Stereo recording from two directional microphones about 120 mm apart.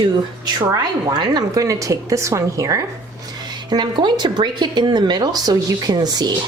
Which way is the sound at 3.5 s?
40° right (ahead or behind).